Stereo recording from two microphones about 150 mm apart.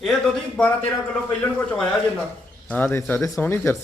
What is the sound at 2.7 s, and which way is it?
A man's voice, 10° left (ahead or behind).